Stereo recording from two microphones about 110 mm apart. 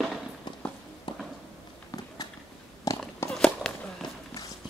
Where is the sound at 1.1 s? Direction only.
45° left (ahead or behind).